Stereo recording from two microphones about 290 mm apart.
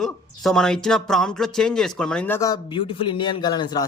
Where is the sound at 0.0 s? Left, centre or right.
Centre.